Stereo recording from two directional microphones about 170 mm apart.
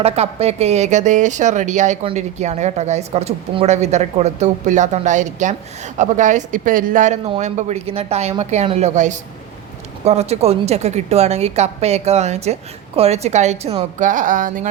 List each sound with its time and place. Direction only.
0.0 s a woman's voice: 35° right (ahead or behind); by 14.7 s 50° right (ahead or behind)